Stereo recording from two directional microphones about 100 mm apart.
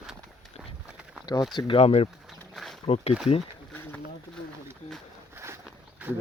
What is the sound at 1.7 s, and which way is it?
Speech, 80° left.